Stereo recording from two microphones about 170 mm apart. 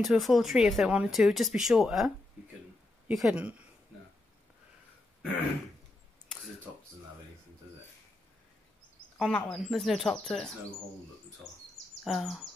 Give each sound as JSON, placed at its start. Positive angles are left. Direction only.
{"t": 0.0, "sound": "speech", "side_deg": 0}
{"t": 9.2, "sound": "speech", "side_deg": 5}
{"t": 12.0, "sound": "speech", "side_deg": 0}